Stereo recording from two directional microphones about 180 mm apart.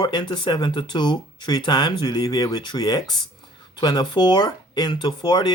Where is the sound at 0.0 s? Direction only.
25° left (ahead or behind).